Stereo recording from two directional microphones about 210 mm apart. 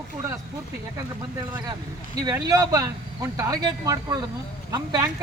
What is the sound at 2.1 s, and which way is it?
Speech, 20° right (ahead or behind).